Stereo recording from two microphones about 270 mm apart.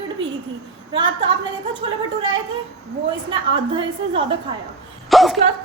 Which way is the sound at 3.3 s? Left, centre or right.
Centre.